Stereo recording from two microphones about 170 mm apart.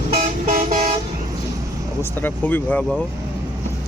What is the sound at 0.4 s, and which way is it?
Vehicle, 50° right (ahead or behind).